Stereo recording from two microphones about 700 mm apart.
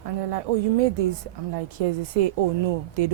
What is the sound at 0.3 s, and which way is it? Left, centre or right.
A woman's voice, right.